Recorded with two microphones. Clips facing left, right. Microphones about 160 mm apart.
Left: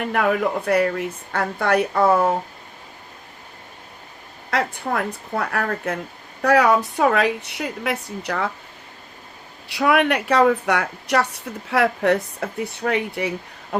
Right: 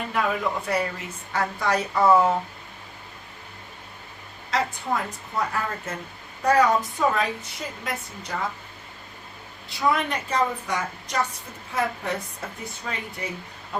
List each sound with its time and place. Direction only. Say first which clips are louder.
0.0 s a woman's voice: left 5 dB; 65° left (ahead or behind)
4.5 s a woman's voice: left 3 dB; 60° left (ahead or behind)
9.6 s a woman's voice: left 6 dB; 70° left (ahead or behind)